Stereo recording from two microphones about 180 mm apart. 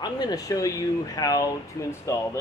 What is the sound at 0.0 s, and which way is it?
Speech, 20° left (ahead or behind).